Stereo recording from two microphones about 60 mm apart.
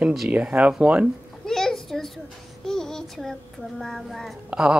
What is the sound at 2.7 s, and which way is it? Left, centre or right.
Child singing, centre.